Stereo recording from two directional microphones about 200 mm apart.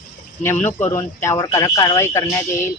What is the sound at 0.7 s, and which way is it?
Speech, 10° left (ahead or behind).